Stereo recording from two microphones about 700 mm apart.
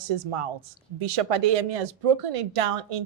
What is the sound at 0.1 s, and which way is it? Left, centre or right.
A woman's voice, right.